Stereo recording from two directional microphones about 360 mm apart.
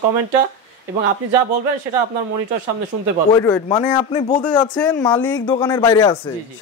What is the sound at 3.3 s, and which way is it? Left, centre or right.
Speech, centre.